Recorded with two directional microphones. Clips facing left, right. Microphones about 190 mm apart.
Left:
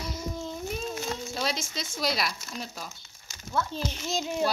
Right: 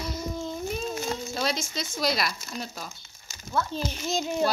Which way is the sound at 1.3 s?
Centre (ahead or behind).